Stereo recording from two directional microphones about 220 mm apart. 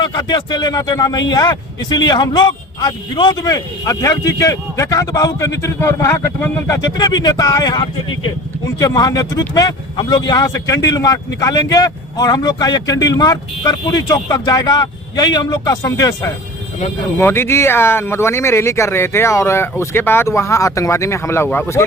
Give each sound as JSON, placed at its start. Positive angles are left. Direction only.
{"t": 0.0, "sound": "speech", "side_deg": 20}